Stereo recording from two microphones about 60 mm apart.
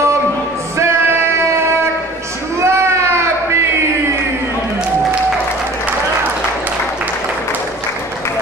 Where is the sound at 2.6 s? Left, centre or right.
Right.